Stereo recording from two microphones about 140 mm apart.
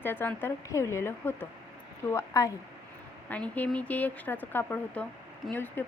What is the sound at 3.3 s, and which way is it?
Speech, 10° left (ahead or behind).